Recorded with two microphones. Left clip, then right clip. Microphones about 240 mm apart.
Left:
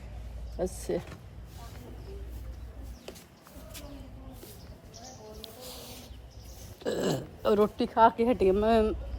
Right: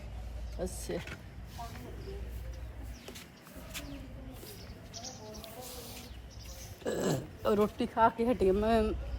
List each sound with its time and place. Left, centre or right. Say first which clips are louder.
0.6 s speech: left 6 dB; centre
5.4 s a sound: left 1 dB; centre
6.8 s speech: left 3 dB; centre